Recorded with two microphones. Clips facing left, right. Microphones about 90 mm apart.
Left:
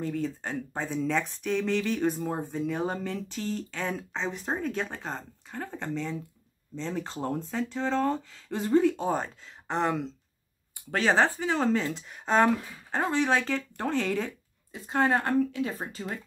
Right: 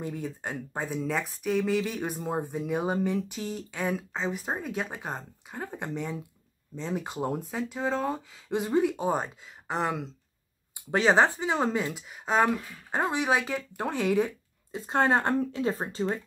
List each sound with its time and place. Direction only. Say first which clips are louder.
0.0 s speech: left 3 dB; 15° right (ahead or behind)
9.7 s speech: left 2 dB; 5° right (ahead or behind)
10.9 s speech: right 2 dB; 20° right (ahead or behind)
14.7 s speech: right 1 dB; 30° right (ahead or behind)